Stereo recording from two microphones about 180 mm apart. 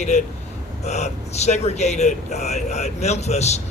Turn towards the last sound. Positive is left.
turn(degrees=40)  # may be behind; listen again after turning